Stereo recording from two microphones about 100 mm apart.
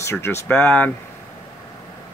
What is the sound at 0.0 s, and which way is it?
Speech, 25° left (ahead or behind).